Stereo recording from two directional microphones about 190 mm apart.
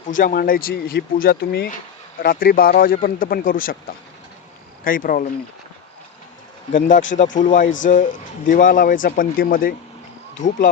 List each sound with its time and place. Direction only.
0.1 s speech: 45° left (ahead or behind)
6.7 s speech: 45° left (ahead or behind)